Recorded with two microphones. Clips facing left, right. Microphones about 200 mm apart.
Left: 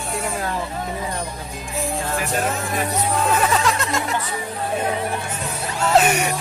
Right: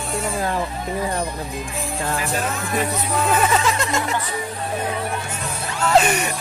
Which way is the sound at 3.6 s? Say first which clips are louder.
Even; centre (ahead or behind).